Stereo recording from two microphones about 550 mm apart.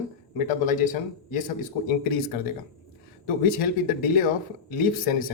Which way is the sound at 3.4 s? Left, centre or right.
Centre.